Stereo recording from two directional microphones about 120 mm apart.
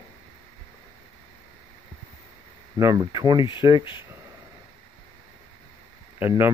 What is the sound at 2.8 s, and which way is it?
Speech, 25° right (ahead or behind).